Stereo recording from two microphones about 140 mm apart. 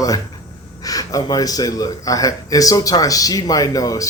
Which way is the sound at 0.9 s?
25° left (ahead or behind).